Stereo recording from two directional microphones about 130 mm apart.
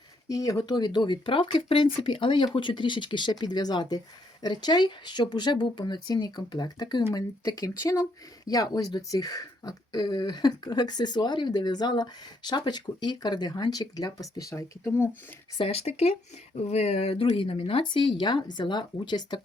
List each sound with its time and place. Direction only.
0.3 s speech: 25° left (ahead or behind)
15.5 s speech: 50° left (ahead or behind)